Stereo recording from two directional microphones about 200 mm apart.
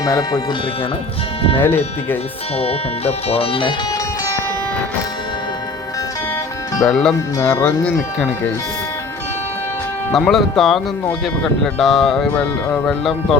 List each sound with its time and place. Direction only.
0.0 s speech: 15° left (ahead or behind)
1.5 s speech: 10° left (ahead or behind)
2.6 s speech: 30° left (ahead or behind)
6.8 s speech: 5° left (ahead or behind)
7.3 s speech: 15° left (ahead or behind)
10.1 s speech: centre (ahead or behind)